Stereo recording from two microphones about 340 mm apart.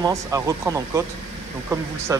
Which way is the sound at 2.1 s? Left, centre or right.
Centre.